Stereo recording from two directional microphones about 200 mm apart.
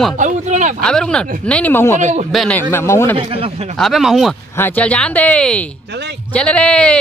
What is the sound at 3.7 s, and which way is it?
Speech, centre (ahead or behind).